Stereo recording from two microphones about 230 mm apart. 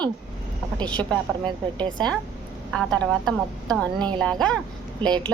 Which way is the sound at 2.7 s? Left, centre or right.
Centre.